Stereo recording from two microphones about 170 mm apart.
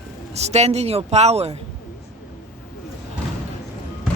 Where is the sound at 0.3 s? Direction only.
40° right (ahead or behind).